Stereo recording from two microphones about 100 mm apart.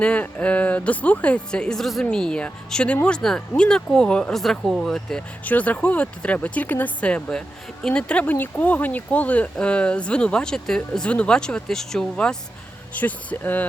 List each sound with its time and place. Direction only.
0.0 s speech: 15° left (ahead or behind)